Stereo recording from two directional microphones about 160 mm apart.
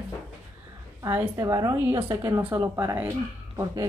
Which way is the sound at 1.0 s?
20° right (ahead or behind).